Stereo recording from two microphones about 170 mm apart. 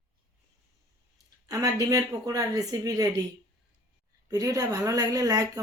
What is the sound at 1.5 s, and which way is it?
A woman's voice, 20° right (ahead or behind).